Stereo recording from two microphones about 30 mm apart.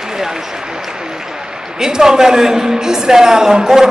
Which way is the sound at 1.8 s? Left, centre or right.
Centre.